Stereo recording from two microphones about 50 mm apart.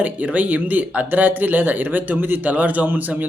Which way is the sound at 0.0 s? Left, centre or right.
Right.